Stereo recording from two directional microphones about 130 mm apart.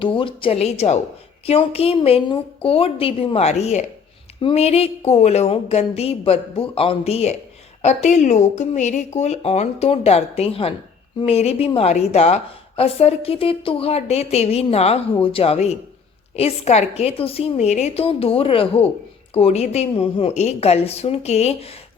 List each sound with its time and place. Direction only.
0.0 s a woman's voice: 40° left (ahead or behind); by 3.8 s 60° left (ahead or behind)
4.4 s a woman's voice: 45° left (ahead or behind)